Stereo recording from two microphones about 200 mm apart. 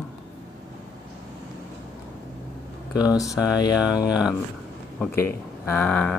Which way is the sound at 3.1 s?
15° left (ahead or behind).